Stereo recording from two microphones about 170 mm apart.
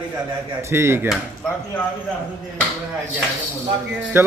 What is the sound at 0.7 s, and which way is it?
Speech, 15° right (ahead or behind).